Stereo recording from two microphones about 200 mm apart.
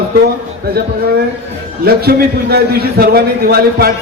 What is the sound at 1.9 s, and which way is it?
A man's voice, 50° right (ahead or behind).